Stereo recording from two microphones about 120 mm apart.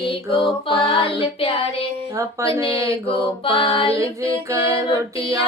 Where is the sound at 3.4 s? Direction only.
50° left (ahead or behind).